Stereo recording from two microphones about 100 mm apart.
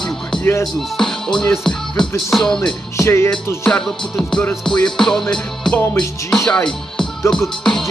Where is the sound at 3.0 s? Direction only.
25° left (ahead or behind).